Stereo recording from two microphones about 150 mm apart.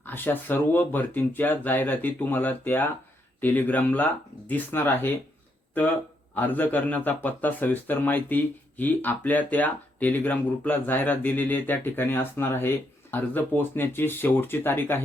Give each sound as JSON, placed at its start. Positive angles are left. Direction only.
{"t": 0.0, "sound": "speech", "side_deg": 15}
{"t": 6.3, "sound": "speech", "side_deg": 10}